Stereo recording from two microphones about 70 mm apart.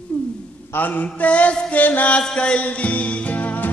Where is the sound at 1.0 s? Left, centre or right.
Centre.